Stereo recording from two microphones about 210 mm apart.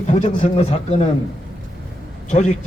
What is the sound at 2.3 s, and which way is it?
Speech, 35° left (ahead or behind).